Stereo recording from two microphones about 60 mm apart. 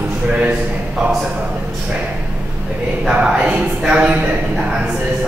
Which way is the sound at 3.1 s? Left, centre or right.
Centre.